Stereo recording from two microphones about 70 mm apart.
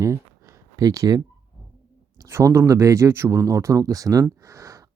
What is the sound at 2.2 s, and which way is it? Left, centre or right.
Speech, right.